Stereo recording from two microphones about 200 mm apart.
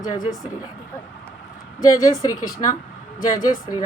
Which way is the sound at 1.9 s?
15° left (ahead or behind).